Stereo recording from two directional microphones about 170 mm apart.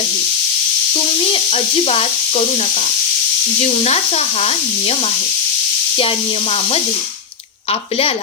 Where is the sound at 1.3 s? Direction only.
35° left (ahead or behind).